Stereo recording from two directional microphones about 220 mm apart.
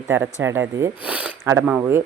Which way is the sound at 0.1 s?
10° right (ahead or behind).